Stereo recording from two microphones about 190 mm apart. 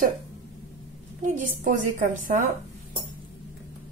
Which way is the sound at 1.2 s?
45° right (ahead or behind).